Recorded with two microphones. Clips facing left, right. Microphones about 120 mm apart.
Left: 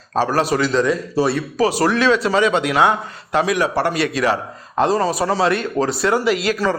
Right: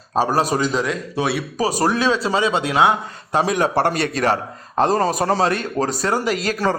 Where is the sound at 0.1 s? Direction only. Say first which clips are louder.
Left 1 dB; 15° right (ahead or behind).